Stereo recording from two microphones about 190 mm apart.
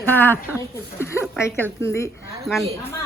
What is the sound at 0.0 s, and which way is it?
Speech, 10° left (ahead or behind).